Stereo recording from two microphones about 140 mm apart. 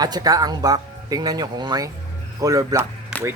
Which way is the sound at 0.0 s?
30° right (ahead or behind).